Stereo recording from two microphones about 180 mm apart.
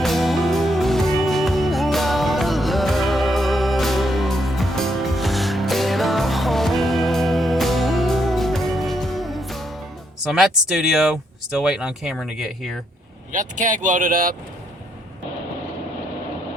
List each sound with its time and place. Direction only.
0.0 s music: centre (ahead or behind)
10.3 s speech: 5° right (ahead or behind)
13.3 s speech: 45° right (ahead or behind)